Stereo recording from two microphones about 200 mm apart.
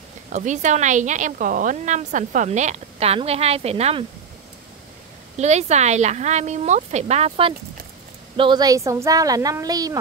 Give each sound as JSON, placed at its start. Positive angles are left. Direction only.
{"t": 0.3, "sound": "speech", "side_deg": -40}
{"t": 5.4, "sound": "speech", "side_deg": -35}